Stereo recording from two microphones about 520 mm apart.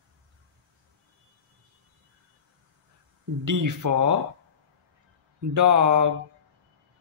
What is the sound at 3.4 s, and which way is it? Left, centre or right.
Speech, right.